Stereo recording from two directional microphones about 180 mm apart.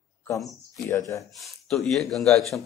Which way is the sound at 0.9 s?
15° left (ahead or behind).